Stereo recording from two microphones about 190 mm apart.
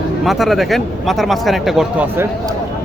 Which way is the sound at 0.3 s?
Centre (ahead or behind).